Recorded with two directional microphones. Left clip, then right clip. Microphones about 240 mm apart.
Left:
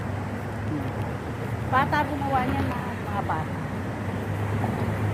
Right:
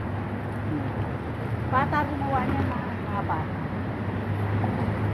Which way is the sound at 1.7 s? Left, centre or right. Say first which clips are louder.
Left 2 dB; left.